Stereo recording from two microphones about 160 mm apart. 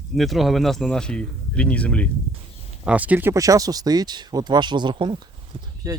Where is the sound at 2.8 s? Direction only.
10° right (ahead or behind).